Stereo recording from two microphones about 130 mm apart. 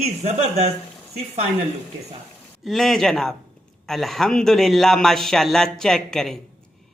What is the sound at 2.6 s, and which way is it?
A man's voice, centre (ahead or behind).